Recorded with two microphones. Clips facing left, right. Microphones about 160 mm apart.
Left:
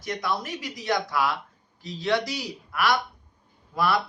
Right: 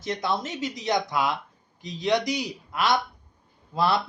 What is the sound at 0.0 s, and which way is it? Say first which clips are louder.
A man's voice: right 2 dB; 25° right (ahead or behind).